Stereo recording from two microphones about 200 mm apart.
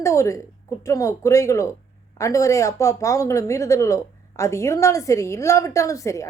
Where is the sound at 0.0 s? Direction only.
15° left (ahead or behind).